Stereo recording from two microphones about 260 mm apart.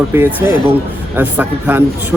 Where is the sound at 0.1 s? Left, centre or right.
Centre.